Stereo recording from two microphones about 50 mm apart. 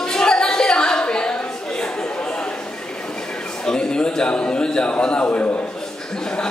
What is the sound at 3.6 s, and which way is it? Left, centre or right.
A man's voice, centre.